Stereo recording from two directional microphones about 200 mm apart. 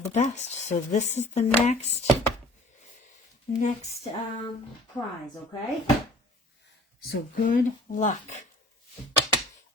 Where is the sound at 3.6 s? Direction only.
35° left (ahead or behind).